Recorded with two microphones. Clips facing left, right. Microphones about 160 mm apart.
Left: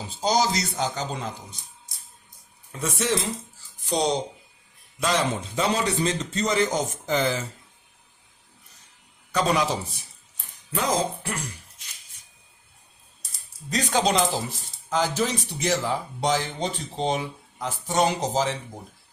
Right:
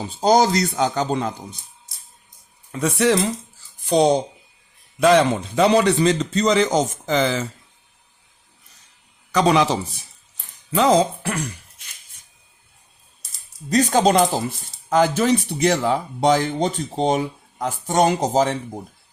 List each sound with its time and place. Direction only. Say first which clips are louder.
0.2 s speech: right 7 dB; 55° right (ahead or behind)
2.8 s a man's voice: right 8 dB; 70° right (ahead or behind); by 7.4 s 90° right
9.3 s a man's voice: right 6 dB; 90° right
10.8 s speech: right 9 dB; 75° right (ahead or behind)
13.7 s speech: right 7 dB; 45° right (ahead or behind)
14.8 s speech: right 7 dB; 60° right (ahead or behind)